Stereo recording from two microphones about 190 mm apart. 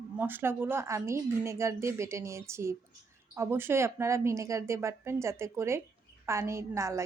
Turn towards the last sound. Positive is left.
turn(degrees=-15)  # may be behind; listen again after turning